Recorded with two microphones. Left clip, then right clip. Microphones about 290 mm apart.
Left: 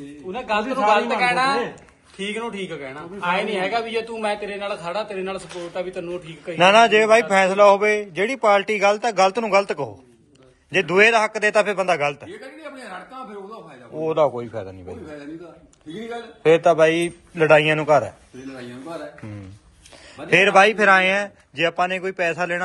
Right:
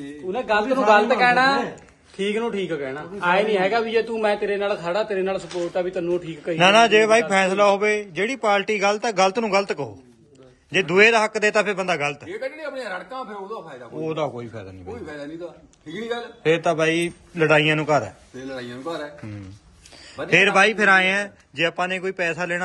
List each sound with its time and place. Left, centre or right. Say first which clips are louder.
0.3 s a man's voice: right 2 dB; right
6.6 s a man's voice: left 1 dB; centre
13.9 s a man's voice: left 7 dB; centre
16.4 s a man's voice: left 5 dB; centre
20.2 s a man's voice: left 2 dB; centre